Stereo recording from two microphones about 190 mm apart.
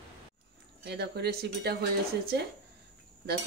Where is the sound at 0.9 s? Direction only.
60° right (ahead or behind).